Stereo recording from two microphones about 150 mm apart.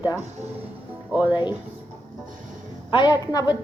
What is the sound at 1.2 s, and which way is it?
Speech, 30° left (ahead or behind).